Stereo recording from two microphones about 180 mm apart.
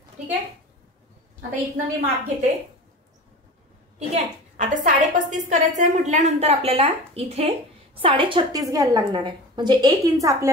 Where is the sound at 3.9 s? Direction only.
40° right (ahead or behind).